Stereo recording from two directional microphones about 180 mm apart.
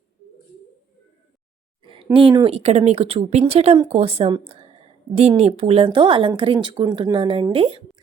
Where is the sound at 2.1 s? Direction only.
25° right (ahead or behind).